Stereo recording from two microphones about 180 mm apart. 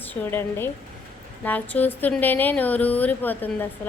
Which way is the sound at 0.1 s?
10° left (ahead or behind).